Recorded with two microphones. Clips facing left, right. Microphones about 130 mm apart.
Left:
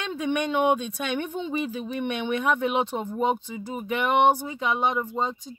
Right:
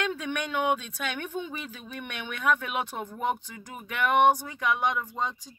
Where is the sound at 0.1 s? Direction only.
20° left (ahead or behind).